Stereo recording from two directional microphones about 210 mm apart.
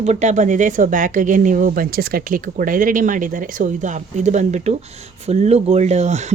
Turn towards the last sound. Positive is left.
turn(degrees=-30)  # may be behind; listen again after turning